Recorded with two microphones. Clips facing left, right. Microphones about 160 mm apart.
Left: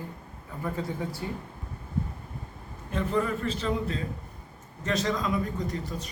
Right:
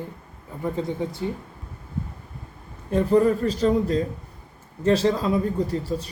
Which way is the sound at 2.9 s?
35° right (ahead or behind).